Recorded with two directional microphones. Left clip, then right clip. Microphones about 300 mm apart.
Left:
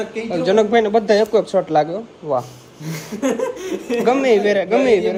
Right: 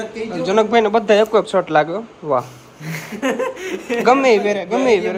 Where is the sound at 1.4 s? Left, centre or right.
Right.